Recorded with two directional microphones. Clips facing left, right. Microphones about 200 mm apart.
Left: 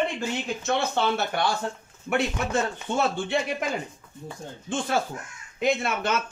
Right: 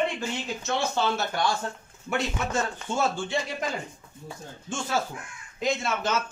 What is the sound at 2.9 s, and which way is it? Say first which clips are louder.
Speech: left 2 dB; 60° left (ahead or behind).